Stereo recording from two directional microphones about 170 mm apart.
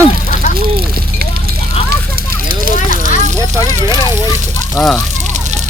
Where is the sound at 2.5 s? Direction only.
55° right (ahead or behind).